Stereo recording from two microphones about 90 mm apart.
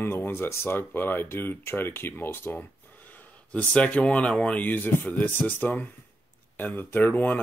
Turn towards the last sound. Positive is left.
turn(degrees=20)  # may be behind; listen again after turning